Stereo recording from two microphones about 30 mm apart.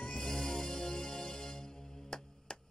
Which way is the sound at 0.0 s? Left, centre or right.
Centre.